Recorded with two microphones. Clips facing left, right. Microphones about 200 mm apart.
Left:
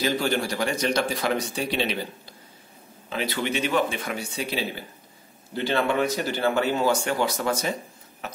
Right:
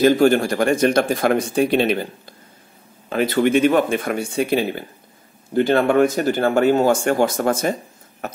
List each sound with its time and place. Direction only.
0.0 s speech: 50° right (ahead or behind)